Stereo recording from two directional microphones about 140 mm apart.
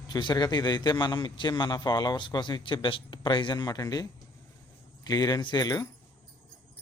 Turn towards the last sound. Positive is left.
turn(degrees=30)  # may be behind; listen again after turning